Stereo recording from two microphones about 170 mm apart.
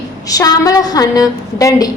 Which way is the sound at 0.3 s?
20° left (ahead or behind).